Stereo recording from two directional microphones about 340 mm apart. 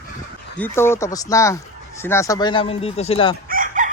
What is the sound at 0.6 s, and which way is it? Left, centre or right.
Speech, centre.